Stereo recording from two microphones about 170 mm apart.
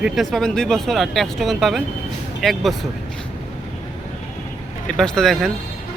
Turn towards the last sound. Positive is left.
turn(degrees=0)  # may be behind; listen again after turning